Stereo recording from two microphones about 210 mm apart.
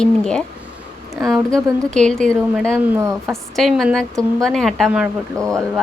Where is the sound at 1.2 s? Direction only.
15° right (ahead or behind).